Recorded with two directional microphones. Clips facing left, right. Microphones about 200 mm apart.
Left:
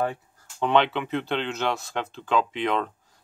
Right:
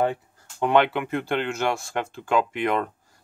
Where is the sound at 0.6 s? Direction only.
10° right (ahead or behind).